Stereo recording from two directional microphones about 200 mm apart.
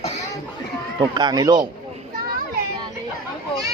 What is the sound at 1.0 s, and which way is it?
Speech, 20° right (ahead or behind).